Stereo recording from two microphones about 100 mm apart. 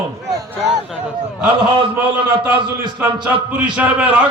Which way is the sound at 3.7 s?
15° right (ahead or behind).